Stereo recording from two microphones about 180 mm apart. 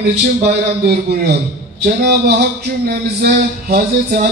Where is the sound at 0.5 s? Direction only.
65° right (ahead or behind).